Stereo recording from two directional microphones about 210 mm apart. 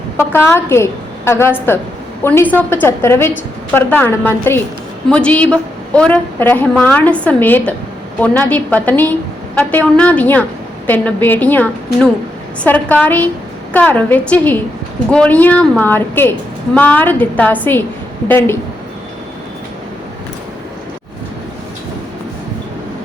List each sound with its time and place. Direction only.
0.2 s a woman's voice: 10° left (ahead or behind)